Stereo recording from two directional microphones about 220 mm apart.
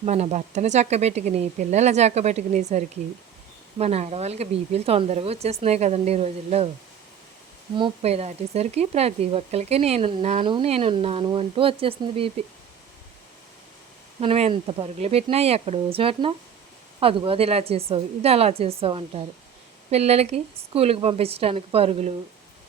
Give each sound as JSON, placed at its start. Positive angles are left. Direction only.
{"t": 0.0, "sound": "speech", "side_deg": -30}
{"t": 7.8, "sound": "speech", "side_deg": -30}
{"t": 14.2, "sound": "speech", "side_deg": -30}